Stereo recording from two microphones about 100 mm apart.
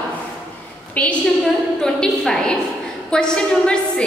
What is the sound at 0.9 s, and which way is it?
A woman's voice, 15° left (ahead or behind).